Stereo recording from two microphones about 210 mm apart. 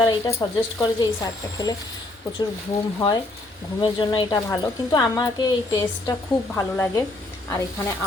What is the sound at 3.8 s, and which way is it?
A woman's voice, 20° left (ahead or behind).